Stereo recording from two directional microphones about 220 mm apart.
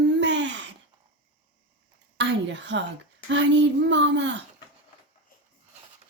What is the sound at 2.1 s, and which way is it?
A woman's voice, 55° right (ahead or behind).